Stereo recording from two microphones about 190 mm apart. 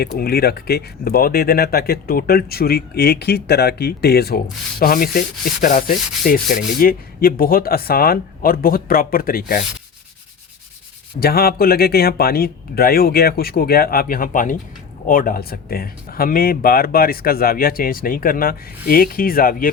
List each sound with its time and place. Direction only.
0.0 s speech: 55° left (ahead or behind)
11.2 s speech: 55° left (ahead or behind)